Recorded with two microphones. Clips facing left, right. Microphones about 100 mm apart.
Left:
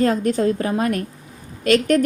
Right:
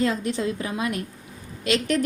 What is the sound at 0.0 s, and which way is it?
A woman's voice, 45° left (ahead or behind).